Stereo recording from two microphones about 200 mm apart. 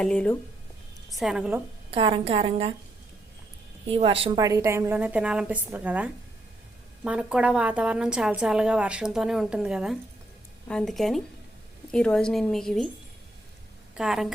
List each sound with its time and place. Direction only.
0.0 s speech: 5° left (ahead or behind)
1.2 s a woman's voice: 5° right (ahead or behind)
1.9 s a woman's voice: 25° right (ahead or behind)
3.8 s a woman's voice: 30° right (ahead or behind)
4.4 s a woman's voice: 15° right (ahead or behind); by 12.9 s centre (ahead or behind)
13.9 s a woman's voice: centre (ahead or behind)